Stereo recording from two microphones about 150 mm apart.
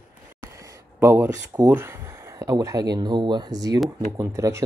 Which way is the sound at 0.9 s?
10° right (ahead or behind).